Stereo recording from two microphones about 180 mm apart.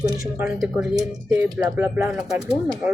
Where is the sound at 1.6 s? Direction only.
20° right (ahead or behind).